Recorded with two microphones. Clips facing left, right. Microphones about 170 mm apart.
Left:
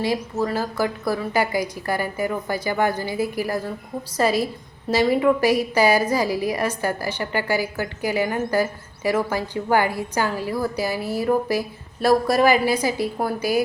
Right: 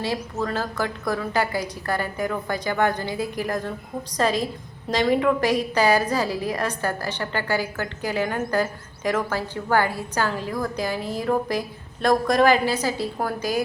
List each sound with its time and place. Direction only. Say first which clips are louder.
0.0 s a woman's voice: left 3 dB; 10° left (ahead or behind)